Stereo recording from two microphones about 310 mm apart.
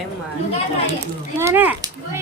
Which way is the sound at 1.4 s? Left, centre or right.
Centre.